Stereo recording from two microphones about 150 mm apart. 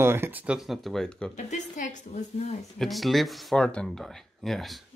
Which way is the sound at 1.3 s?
55° left (ahead or behind).